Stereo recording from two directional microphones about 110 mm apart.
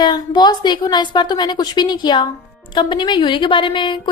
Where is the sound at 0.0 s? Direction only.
40° left (ahead or behind).